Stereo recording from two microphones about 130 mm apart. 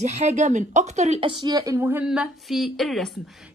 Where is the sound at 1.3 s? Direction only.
35° right (ahead or behind).